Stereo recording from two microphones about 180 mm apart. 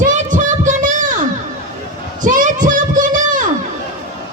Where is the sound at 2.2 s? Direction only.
45° right (ahead or behind).